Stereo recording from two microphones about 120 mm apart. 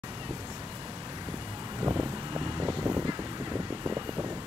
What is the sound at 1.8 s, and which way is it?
Vehicle, 30° right (ahead or behind).